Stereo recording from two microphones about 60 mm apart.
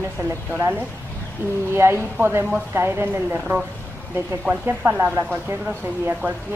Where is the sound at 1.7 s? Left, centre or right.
Right.